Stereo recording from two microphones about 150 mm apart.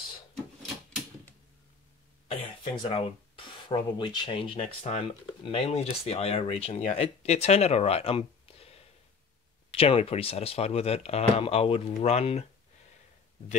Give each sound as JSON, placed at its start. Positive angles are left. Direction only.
{"t": 0.6, "sound": "typewriter", "side_deg": 5}
{"t": 2.6, "sound": "speech", "side_deg": 35}